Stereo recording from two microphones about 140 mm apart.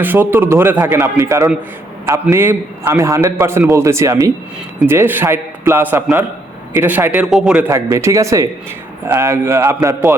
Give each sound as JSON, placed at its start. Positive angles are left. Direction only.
{"t": 0.0, "sound": "a man's voice", "side_deg": -15}
{"t": 7.7, "sound": "a man's voice", "side_deg": -20}
{"t": 9.0, "sound": "a man's voice", "side_deg": -10}